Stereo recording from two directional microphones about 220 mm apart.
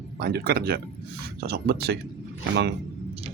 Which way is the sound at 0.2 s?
45° right (ahead or behind).